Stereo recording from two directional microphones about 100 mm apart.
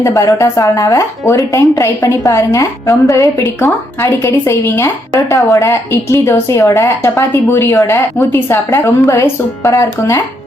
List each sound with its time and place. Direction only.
0.0 s a woman's voice: 35° left (ahead or behind)